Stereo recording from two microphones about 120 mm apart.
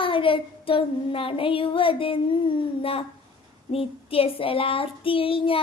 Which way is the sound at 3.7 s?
50° left (ahead or behind).